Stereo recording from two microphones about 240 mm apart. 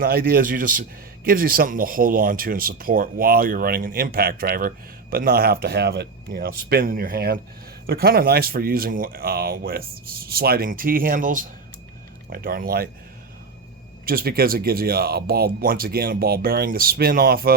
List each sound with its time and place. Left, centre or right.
0.0 s speech: right
14.0 s speech: right